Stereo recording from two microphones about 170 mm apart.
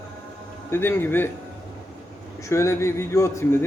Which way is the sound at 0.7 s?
15° left (ahead or behind).